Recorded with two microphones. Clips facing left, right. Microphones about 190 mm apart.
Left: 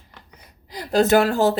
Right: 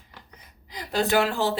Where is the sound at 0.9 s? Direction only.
45° left (ahead or behind).